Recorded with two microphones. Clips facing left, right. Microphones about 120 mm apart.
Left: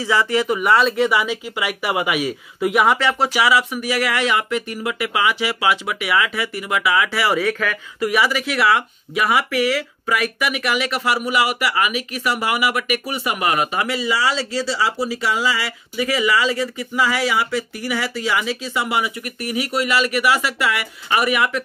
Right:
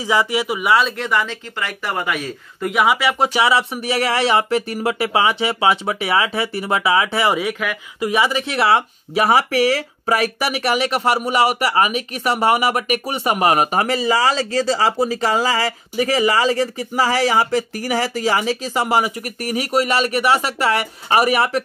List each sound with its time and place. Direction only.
0.0 s speech: 15° right (ahead or behind); by 3.0 s centre (ahead or behind)
3.0 s speech: 15° right (ahead or behind)
3.3 s speech: 25° right (ahead or behind)